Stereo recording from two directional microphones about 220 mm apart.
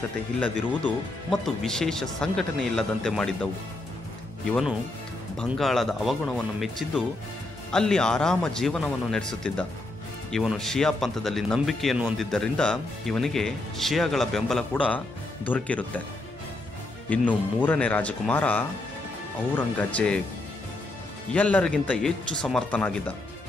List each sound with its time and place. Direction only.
0.8 s speech: centre (ahead or behind)
4.5 s speech: centre (ahead or behind)
17.3 s speech: 5° left (ahead or behind)
21.3 s speech: 5° left (ahead or behind)